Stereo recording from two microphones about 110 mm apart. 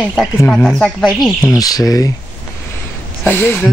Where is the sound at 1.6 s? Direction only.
35° left (ahead or behind).